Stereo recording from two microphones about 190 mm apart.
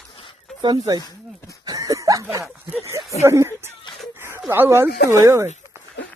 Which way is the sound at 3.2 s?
15° right (ahead or behind).